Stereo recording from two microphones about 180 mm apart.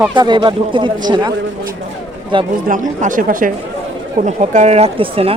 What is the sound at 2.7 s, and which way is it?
Speech, 45° right (ahead or behind).